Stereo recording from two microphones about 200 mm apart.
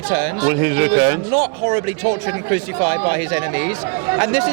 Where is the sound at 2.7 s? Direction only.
25° right (ahead or behind).